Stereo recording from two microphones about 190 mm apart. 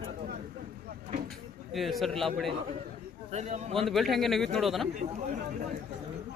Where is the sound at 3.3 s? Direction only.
35° right (ahead or behind).